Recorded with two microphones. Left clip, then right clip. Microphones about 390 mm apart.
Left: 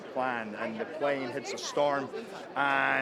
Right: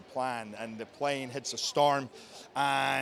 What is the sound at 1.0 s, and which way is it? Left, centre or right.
Speech, right.